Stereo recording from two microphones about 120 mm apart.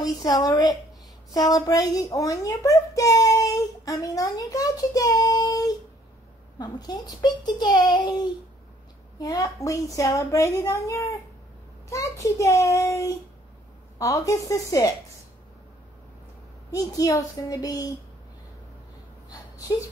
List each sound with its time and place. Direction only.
0.0 s a woman's voice: 35° left (ahead or behind)
16.7 s a child's voice: 30° left (ahead or behind)